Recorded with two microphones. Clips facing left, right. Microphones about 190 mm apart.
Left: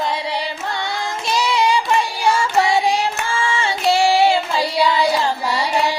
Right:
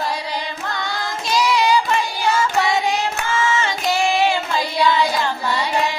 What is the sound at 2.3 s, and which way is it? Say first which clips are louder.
Music: left 2 dB; 30° left (ahead or behind).